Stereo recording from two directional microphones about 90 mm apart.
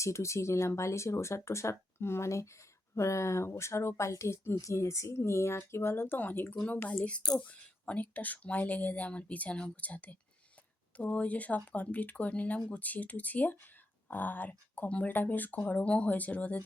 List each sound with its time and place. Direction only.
0.0 s speech: 30° left (ahead or behind); by 16.6 s 15° left (ahead or behind)